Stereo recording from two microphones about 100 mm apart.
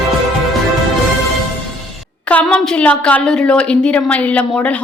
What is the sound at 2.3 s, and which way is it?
A woman's voice, 10° left (ahead or behind).